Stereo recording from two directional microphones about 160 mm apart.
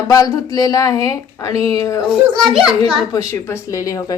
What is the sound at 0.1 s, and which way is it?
A woman's voice, 20° left (ahead or behind).